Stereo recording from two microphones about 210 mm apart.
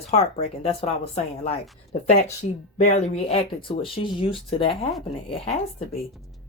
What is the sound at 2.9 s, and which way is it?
Speech, 30° left (ahead or behind).